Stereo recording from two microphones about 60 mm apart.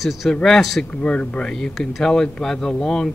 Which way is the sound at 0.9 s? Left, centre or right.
Centre.